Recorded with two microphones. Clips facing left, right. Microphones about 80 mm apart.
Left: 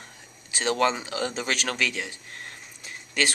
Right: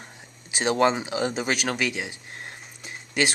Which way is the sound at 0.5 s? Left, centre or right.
Centre.